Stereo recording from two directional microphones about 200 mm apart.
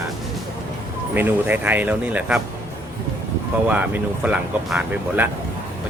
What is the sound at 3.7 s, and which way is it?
Speech, 5° right (ahead or behind).